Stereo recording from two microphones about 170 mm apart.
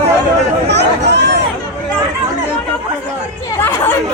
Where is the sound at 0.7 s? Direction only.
85° right.